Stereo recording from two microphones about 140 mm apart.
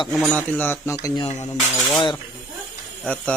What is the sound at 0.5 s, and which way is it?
Speech, 15° left (ahead or behind).